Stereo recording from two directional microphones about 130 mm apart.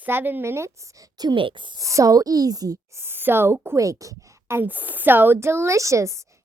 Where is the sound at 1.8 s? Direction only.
25° right (ahead or behind).